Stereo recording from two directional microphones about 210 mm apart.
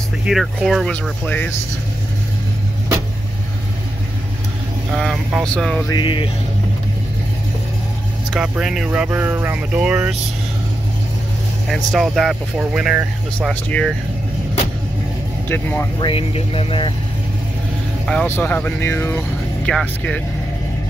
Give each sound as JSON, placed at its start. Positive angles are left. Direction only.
{"t": 0.2, "sound": "speech", "side_deg": -5}
{"t": 4.9, "sound": "speech", "side_deg": 0}
{"t": 5.9, "sound": "speech", "side_deg": 20}
{"t": 8.3, "sound": "speech", "side_deg": -5}
{"t": 11.7, "sound": "speech", "side_deg": 0}
{"t": 15.4, "sound": "speech", "side_deg": 10}
{"t": 16.0, "sound": "speech", "side_deg": 25}
{"t": 18.0, "sound": "speech", "side_deg": 5}